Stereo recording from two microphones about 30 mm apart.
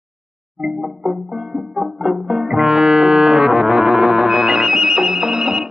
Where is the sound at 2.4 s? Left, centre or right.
Centre.